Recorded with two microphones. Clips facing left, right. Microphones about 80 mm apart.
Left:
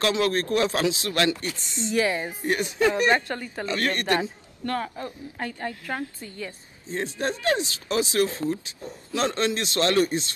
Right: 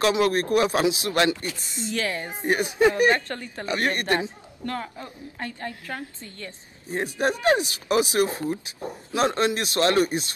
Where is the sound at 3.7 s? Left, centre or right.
Centre.